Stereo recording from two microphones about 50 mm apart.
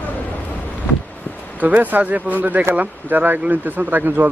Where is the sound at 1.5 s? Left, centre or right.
Right.